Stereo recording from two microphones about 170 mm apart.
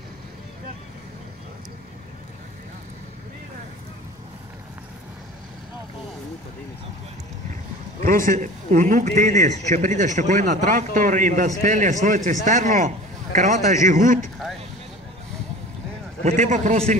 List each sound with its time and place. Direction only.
8.3 s a man's voice: 45° right (ahead or behind)
16.3 s a man's voice: 45° right (ahead or behind)